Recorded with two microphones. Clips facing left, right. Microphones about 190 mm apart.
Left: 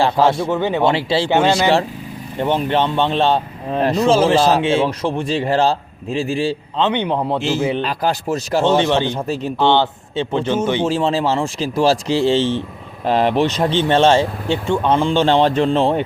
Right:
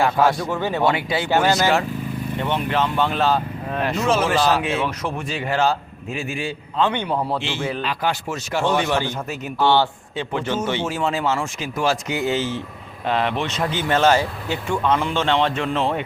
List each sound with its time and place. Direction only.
0.0 s speech: 25° left (ahead or behind)
0.9 s speech: 30° left (ahead or behind)
6.8 s speech: 20° left (ahead or behind)
7.9 s speech: 35° left (ahead or behind)
8.6 s speech: 25° left (ahead or behind)
9.2 s speech: 35° left (ahead or behind)
9.6 s speech: 20° left (ahead or behind)
10.8 s speech: 30° left (ahead or behind)